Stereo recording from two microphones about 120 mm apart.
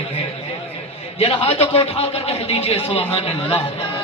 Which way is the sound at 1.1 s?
55° left (ahead or behind).